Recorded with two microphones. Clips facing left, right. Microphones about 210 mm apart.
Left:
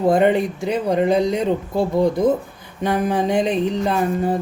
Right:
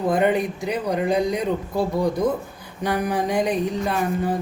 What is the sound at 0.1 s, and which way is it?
Speech, 25° left (ahead or behind).